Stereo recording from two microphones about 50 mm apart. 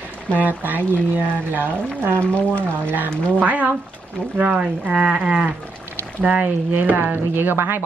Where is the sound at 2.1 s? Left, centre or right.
Left.